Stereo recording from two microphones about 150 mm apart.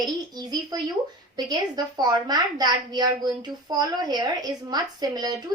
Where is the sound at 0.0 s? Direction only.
25° right (ahead or behind).